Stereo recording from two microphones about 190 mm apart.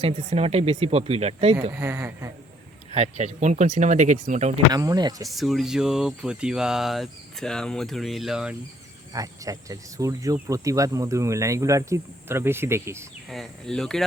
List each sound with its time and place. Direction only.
0.0 s speech: 35° right (ahead or behind)
1.7 s speech: 10° right (ahead or behind)
2.9 s speech: 35° right (ahead or behind)
4.7 s speech: 20° right (ahead or behind)
5.3 s speech: centre (ahead or behind)
9.1 s speech: 20° right (ahead or behind)
13.3 s speech: centre (ahead or behind)